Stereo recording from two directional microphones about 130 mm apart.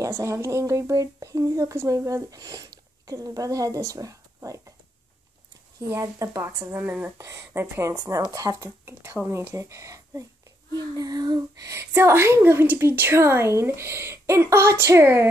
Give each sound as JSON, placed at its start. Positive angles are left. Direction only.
{"t": 0.0, "sound": "speech", "side_deg": -25}
{"t": 5.8, "sound": "speech", "side_deg": -25}
{"t": 7.9, "sound": "speech", "side_deg": -30}